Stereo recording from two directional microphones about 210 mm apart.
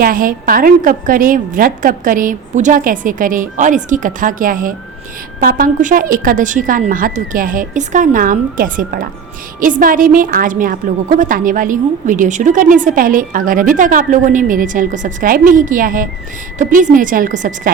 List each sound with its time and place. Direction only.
0.0 s a woman's voice: 40° right (ahead or behind)